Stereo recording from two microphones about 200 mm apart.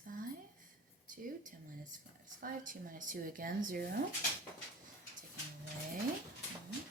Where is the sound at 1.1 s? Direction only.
40° right (ahead or behind).